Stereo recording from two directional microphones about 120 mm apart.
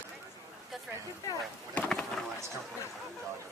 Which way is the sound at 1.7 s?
10° left (ahead or behind).